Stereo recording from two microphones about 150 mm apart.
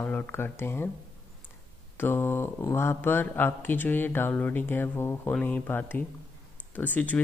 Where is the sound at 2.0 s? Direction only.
15° left (ahead or behind).